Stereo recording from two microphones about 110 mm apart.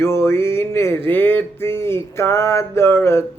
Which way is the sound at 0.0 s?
20° left (ahead or behind).